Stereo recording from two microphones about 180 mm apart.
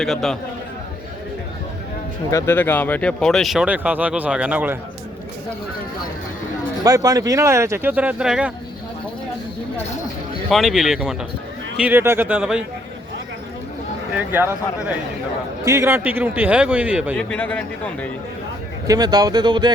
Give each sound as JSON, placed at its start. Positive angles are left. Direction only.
{"t": 0.0, "sound": "speech", "side_deg": 0}
{"t": 2.3, "sound": "speech", "side_deg": 10}
{"t": 6.8, "sound": "speech", "side_deg": -20}
{"t": 10.5, "sound": "speech", "side_deg": 0}
{"t": 14.2, "sound": "speech", "side_deg": -10}
{"t": 17.2, "sound": "speech", "side_deg": 10}
{"t": 18.9, "sound": "speech", "side_deg": -20}